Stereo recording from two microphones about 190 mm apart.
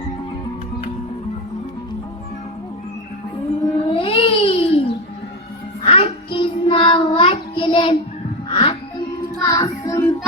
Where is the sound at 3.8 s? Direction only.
30° left (ahead or behind).